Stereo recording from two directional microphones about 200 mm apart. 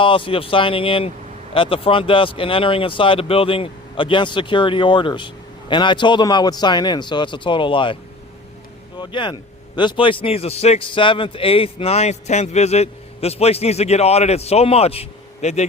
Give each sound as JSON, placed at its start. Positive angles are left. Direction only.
{"t": 0.0, "sound": "speech", "side_deg": 25}
{"t": 9.0, "sound": "a man's voice", "side_deg": 25}